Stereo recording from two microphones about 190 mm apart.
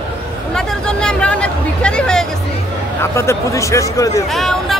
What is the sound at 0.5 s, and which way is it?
A man's voice, 5° left (ahead or behind).